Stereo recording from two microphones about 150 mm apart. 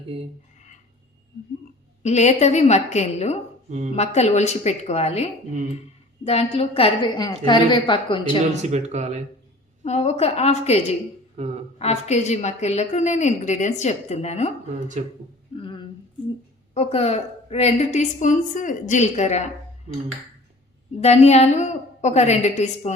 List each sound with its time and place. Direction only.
2.0 s a woman's voice: 50° left (ahead or behind)
8.5 s speech: 50° right (ahead or behind)
9.8 s a woman's voice: 45° left (ahead or behind)
11.4 s speech: 45° right (ahead or behind)
11.8 s a woman's voice: 45° left (ahead or behind)
15.0 s speech: 50° right (ahead or behind)
15.5 s a sound: 35° left (ahead or behind)
16.7 s a woman's voice: 45° left (ahead or behind)
21.0 s a woman's voice: 45° left (ahead or behind)